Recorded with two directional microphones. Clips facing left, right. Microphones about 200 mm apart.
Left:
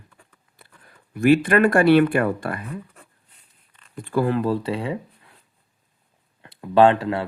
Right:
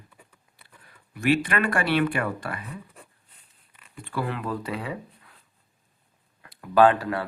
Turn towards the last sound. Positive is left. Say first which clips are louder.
# left 3 dB
turn(degrees=25)  # may be behind; listen again after turning